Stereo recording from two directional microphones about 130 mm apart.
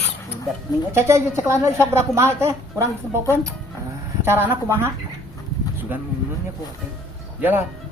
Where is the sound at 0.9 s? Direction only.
20° right (ahead or behind).